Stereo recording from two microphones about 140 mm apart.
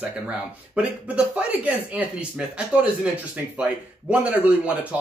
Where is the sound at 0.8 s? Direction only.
10° right (ahead or behind).